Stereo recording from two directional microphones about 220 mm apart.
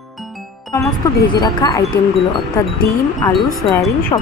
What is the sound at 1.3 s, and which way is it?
Speech, 20° left (ahead or behind).